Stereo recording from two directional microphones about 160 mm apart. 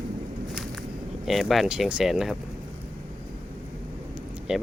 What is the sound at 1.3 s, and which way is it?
Speech, centre (ahead or behind).